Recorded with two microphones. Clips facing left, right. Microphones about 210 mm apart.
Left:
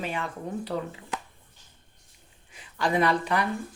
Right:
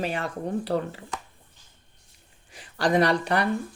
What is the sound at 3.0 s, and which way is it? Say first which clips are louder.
Speech: right 2 dB; 70° right (ahead or behind).